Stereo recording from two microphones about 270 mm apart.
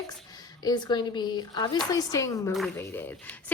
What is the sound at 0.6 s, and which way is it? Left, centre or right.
A woman's voice, centre.